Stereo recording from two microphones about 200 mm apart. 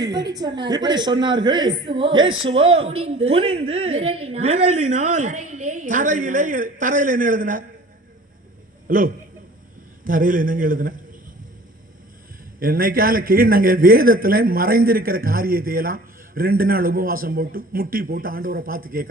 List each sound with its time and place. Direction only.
0.3 s a woman's voice: 20° right (ahead or behind); by 7.6 s 40° right (ahead or behind)
8.9 s speech: 45° right (ahead or behind)
12.5 s speech: 45° right (ahead or behind)